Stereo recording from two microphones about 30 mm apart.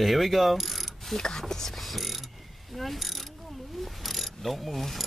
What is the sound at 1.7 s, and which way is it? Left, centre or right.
Mechanisms, centre.